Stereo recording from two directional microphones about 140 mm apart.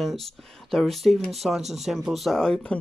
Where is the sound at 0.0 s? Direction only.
Centre (ahead or behind).